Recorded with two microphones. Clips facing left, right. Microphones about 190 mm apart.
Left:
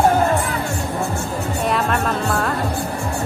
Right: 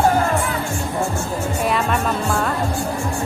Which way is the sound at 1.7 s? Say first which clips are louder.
Left 2 dB; centre (ahead or behind).